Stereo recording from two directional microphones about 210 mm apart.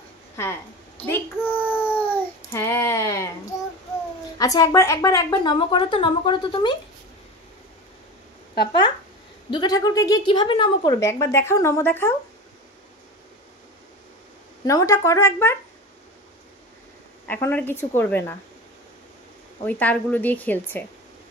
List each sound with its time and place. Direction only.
1.0 s child singing: 10° left (ahead or behind)
1.4 s a sound: 10° left (ahead or behind)
1.7 s dog: 10° left (ahead or behind)
4.4 s a woman's voice: 15° left (ahead or behind)
9.5 s a woman's voice: 20° left (ahead or behind)
14.7 s a woman's voice: 15° left (ahead or behind)
17.3 s a woman's voice: 10° left (ahead or behind)
19.6 s a woman's voice: 10° left (ahead or behind)